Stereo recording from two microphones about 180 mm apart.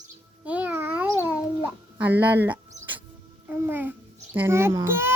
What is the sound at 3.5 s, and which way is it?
Speech, 10° right (ahead or behind).